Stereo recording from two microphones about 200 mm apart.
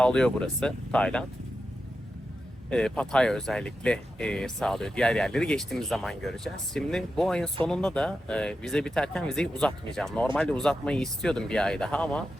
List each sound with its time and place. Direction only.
0.0 s speech: 5° left (ahead or behind)
2.6 s speech: 5° left (ahead or behind)